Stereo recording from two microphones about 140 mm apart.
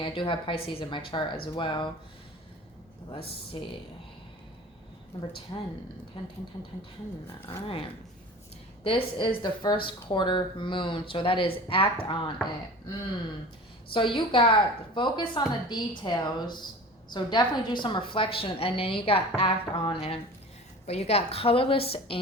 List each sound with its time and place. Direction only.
0.0 s a woman's voice: 35° left (ahead or behind)
3.1 s a woman's voice: 40° left (ahead or behind)
5.5 s speech: 30° left (ahead or behind)
6.2 s a woman's voice: 40° left (ahead or behind)
8.8 s a woman's voice: 35° left (ahead or behind)
13.9 s a woman's voice: 35° left (ahead or behind)